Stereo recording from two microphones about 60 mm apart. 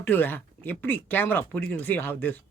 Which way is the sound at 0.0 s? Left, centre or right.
Left.